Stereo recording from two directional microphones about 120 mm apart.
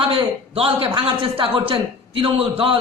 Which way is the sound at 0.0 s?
50° right (ahead or behind).